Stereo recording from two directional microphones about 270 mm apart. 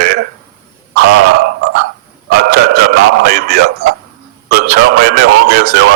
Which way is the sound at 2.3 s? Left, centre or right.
Right.